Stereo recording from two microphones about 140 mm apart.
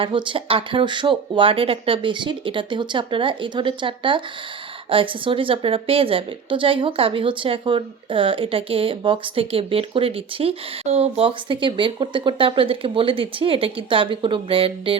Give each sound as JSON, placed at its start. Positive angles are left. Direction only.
{"t": 0.0, "sound": "a woman's voice", "side_deg": -35}